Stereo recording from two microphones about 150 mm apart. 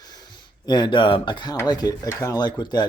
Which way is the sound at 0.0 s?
25° left (ahead or behind).